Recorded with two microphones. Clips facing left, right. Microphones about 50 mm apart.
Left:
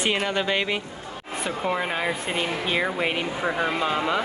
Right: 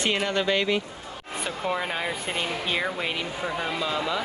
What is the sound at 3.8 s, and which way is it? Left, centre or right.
Speech, left.